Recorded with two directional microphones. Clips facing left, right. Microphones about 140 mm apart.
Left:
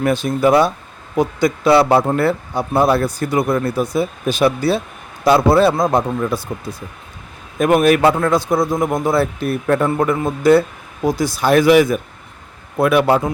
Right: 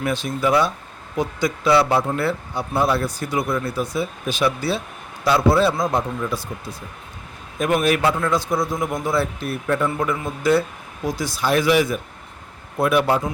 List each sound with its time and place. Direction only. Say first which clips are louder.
0.0 s a man's voice: left 7 dB; 45° left (ahead or behind)
7.6 s a man's voice: left 6 dB; 50° left (ahead or behind)
11.3 s a man's voice: left 6 dB; 50° left (ahead or behind)
12.8 s a man's voice: left 5 dB; 70° left (ahead or behind)